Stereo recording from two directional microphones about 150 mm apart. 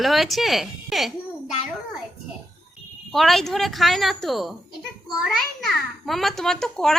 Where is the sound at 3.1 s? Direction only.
Centre (ahead or behind).